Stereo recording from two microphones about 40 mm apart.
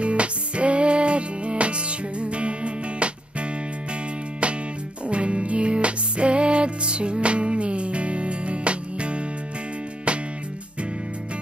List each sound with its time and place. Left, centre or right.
0.0 s music: right
5.0 s music: right